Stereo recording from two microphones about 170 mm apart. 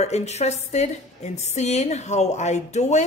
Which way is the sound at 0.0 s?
40° left (ahead or behind).